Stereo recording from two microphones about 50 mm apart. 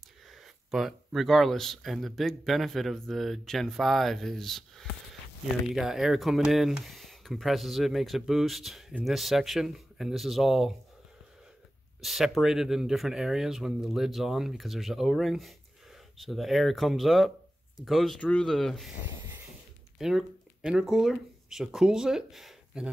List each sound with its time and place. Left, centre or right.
0.3 s speech: centre
5.8 s speech: centre
12.0 s speech: centre
19.0 s a sound: right
20.0 s speech: centre